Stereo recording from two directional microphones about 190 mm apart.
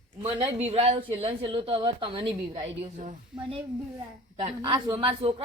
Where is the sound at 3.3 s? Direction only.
25° right (ahead or behind).